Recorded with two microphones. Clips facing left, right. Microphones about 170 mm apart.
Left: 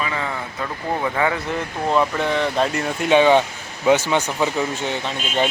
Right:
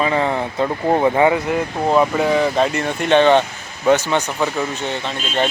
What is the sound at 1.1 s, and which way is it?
Speech, 25° right (ahead or behind).